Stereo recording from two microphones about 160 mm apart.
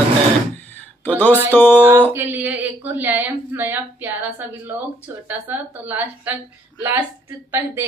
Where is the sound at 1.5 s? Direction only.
10° left (ahead or behind).